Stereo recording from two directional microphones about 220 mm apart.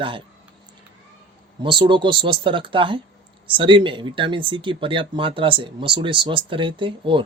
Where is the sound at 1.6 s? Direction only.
20° right (ahead or behind).